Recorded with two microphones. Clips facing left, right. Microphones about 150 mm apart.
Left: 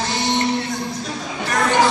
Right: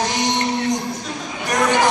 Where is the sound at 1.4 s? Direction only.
20° right (ahead or behind).